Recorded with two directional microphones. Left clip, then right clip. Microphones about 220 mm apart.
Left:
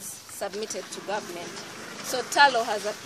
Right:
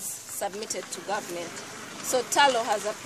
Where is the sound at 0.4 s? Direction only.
5° right (ahead or behind).